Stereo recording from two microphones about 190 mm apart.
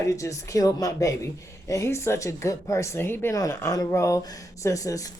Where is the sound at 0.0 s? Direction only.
15° left (ahead or behind).